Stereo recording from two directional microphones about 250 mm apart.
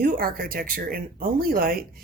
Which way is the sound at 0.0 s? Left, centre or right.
Right.